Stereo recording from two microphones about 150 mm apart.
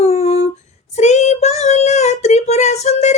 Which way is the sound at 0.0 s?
45° left (ahead or behind).